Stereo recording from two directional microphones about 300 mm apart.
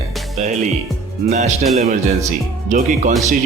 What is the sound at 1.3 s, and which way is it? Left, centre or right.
Speech, right.